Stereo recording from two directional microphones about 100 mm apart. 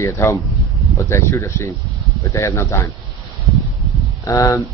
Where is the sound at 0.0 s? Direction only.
30° left (ahead or behind).